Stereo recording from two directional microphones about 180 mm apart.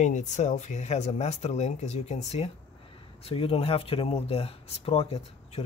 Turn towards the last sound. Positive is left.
turn(degrees=35)  # may be behind; listen again after turning